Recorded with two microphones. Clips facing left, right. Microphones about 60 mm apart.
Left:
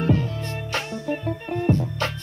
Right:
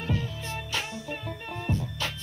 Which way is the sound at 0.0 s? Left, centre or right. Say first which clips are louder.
Left 9 dB; left.